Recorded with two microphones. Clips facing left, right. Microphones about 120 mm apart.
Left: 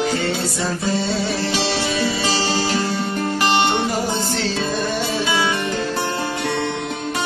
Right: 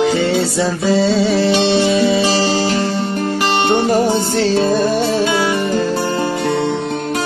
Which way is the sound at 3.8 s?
55° right (ahead or behind).